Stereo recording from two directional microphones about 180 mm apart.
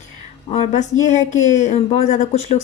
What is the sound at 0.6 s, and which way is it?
A woman's voice, 40° left (ahead or behind).